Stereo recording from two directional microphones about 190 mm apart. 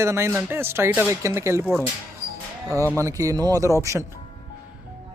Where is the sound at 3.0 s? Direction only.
15° right (ahead or behind).